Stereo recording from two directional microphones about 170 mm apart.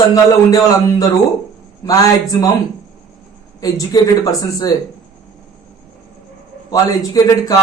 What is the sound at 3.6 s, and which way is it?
Speech, 20° left (ahead or behind).